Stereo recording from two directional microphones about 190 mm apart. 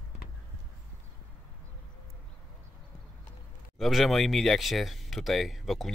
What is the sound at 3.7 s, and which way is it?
Speech, centre (ahead or behind).